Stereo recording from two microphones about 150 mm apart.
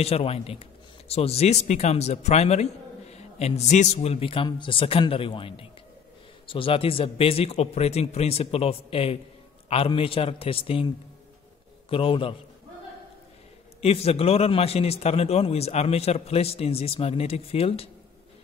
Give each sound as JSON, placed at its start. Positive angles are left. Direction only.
{"t": 0.0, "sound": "a man's voice", "side_deg": 40}
{"t": 11.9, "sound": "a man's voice", "side_deg": 35}
{"t": 13.7, "sound": "a man's voice", "side_deg": 40}